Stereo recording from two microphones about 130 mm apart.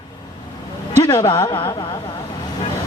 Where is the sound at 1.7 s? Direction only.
30° left (ahead or behind).